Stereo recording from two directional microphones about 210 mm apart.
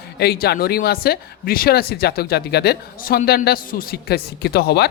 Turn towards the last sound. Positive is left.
turn(degrees=50)  # may be behind; listen again after turning